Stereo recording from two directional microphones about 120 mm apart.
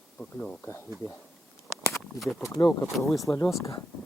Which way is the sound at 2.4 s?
30° left (ahead or behind).